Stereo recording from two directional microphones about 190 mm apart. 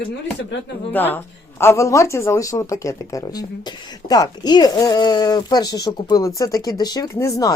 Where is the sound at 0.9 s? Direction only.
10° left (ahead or behind).